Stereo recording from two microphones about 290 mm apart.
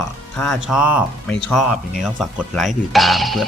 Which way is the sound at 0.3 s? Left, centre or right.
Centre.